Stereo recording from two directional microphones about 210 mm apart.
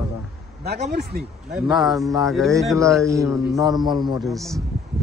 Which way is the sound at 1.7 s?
Centre (ahead or behind).